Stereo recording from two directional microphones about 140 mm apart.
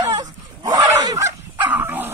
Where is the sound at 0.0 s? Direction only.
30° right (ahead or behind).